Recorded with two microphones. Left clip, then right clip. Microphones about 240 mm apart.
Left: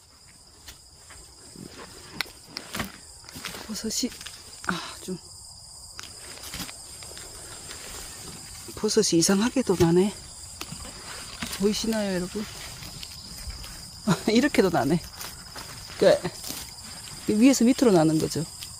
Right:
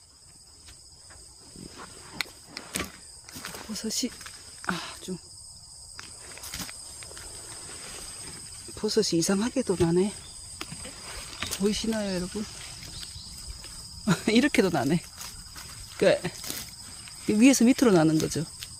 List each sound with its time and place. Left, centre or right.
1.8 s a sound: centre
6.5 s walk: centre
8.7 s speech: centre
11.6 s speech: centre
14.0 s speech: centre